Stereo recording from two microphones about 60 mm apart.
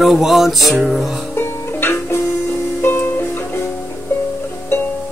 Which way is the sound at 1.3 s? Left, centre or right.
Left.